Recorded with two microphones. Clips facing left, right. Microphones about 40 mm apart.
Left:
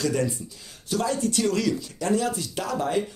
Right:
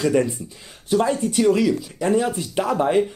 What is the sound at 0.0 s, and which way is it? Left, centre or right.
Speech, right.